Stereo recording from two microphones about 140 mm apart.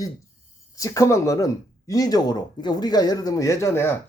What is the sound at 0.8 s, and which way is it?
Speech, 25° left (ahead or behind).